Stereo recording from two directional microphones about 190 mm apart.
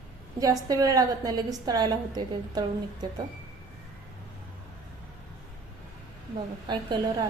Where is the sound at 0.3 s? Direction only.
20° right (ahead or behind).